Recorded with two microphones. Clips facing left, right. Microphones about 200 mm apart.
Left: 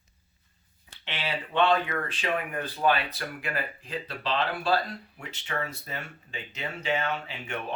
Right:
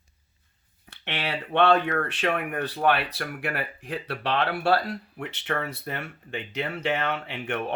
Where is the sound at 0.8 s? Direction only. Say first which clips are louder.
Right 3 dB; 65° right (ahead or behind).